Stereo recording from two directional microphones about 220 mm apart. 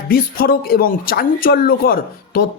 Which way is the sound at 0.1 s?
45° left (ahead or behind).